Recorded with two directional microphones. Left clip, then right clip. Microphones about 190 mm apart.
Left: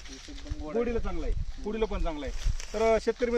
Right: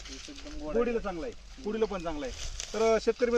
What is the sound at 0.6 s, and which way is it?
Speech, 20° left (ahead or behind).